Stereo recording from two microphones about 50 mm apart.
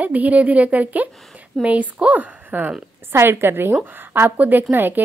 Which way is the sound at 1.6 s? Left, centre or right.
Centre.